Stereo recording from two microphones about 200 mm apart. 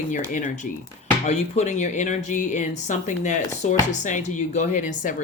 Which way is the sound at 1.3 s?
35° left (ahead or behind).